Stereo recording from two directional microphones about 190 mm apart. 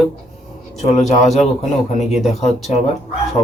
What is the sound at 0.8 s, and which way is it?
Speech, 35° left (ahead or behind).